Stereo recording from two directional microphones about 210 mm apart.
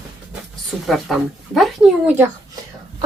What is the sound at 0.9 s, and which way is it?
A woman's voice, centre (ahead or behind).